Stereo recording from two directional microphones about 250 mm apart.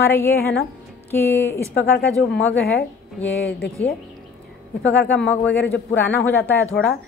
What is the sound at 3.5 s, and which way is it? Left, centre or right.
Speech, left.